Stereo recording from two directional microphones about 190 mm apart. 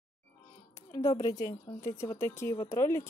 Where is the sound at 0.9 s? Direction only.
20° left (ahead or behind).